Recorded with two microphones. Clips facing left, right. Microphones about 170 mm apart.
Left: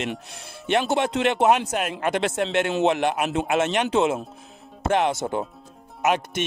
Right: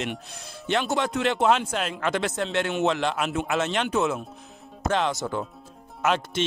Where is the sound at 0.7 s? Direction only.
20° left (ahead or behind).